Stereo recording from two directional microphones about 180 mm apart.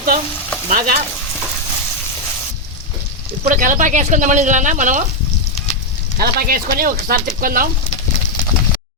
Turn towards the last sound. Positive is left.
turn(degrees=-50)  # may be behind; listen again after turning